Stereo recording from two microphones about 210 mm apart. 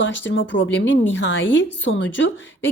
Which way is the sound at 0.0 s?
60° left (ahead or behind).